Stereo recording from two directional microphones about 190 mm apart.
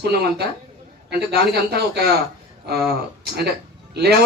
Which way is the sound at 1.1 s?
55° right (ahead or behind).